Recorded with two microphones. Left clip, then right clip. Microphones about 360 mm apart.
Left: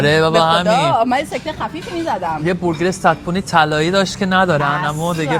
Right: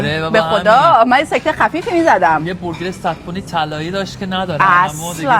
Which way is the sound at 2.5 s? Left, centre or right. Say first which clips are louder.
Left 5 dB; left.